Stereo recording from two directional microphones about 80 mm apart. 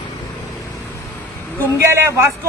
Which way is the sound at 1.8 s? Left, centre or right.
Right.